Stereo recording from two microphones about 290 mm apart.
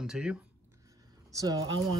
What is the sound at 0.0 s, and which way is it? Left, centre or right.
Speech, centre.